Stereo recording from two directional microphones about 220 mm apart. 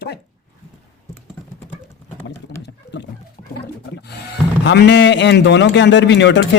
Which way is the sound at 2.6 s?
55° left (ahead or behind).